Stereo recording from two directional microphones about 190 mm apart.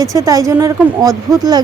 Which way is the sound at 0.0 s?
15° right (ahead or behind).